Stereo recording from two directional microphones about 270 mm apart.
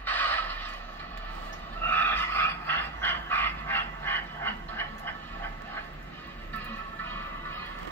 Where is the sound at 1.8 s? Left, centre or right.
Centre.